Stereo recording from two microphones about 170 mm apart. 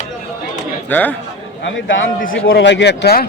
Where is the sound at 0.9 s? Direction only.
10° left (ahead or behind).